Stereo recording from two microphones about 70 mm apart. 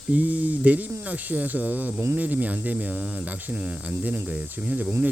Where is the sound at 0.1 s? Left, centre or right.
Centre.